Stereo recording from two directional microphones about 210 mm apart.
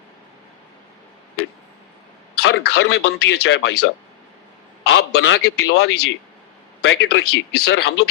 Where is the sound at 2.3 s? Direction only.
50° left (ahead or behind).